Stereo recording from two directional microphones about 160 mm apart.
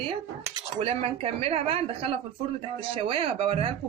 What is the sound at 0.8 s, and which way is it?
Speech, 40° right (ahead or behind).